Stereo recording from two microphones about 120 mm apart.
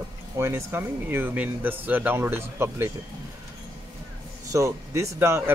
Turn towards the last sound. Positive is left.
turn(degrees=-25)  # may be behind; listen again after turning